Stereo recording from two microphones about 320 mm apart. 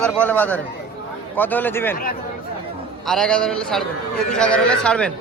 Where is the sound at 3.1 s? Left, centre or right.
Centre.